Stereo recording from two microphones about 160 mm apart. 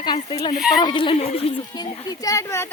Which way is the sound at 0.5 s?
Centre (ahead or behind).